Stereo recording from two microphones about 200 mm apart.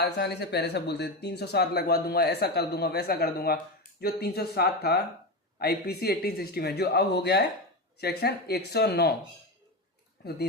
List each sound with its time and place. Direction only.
0.0 s speech: 55° left (ahead or behind)
10.2 s speech: 55° left (ahead or behind)